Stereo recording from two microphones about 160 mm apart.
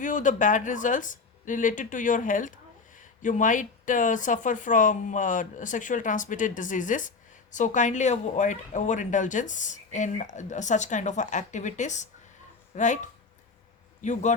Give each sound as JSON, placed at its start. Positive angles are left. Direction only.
{"t": 0.0, "sound": "speech", "side_deg": 55}
{"t": 14.0, "sound": "speech", "side_deg": 50}